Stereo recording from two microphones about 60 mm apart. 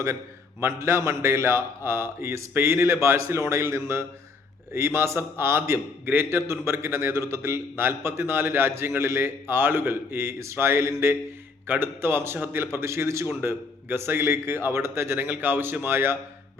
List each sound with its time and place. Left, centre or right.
0.6 s a man's voice: right
2.5 s a man's voice: right